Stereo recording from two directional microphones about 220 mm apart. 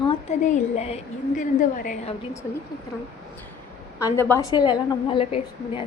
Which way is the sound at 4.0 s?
10° left (ahead or behind).